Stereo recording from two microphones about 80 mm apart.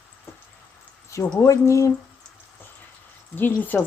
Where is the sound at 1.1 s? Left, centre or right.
Left.